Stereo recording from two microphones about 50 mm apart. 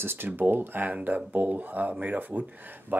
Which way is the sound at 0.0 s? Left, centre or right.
Right.